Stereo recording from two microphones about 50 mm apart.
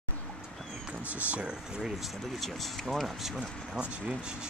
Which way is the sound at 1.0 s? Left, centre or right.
Right.